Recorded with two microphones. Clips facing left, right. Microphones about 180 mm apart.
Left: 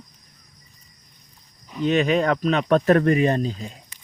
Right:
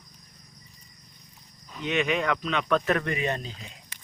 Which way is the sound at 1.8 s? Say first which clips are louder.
Left 7 dB; 35° left (ahead or behind).